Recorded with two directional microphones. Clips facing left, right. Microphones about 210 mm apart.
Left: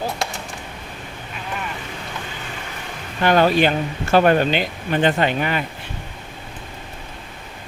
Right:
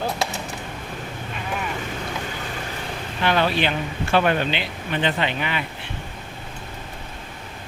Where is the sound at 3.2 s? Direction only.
45° left (ahead or behind).